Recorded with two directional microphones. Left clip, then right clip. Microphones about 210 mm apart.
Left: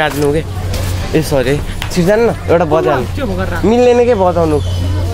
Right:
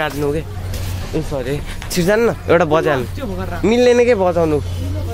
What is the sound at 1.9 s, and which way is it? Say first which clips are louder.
Speech: left 4 dB; 25° right (ahead or behind).